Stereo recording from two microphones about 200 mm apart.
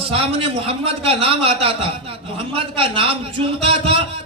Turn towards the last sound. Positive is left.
turn(degrees=-30)  # may be behind; listen again after turning